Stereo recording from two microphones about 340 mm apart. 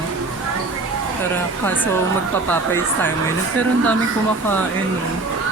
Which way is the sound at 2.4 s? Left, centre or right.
Centre.